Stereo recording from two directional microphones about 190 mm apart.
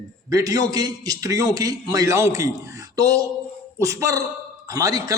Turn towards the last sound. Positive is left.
turn(degrees=-20)  # may be behind; listen again after turning